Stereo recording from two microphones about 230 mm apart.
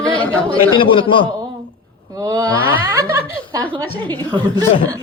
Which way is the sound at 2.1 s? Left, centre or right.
Centre.